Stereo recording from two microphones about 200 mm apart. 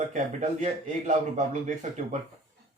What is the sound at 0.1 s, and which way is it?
Speech, 40° right (ahead or behind).